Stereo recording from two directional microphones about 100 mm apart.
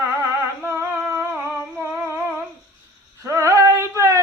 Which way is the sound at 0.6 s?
25° right (ahead or behind).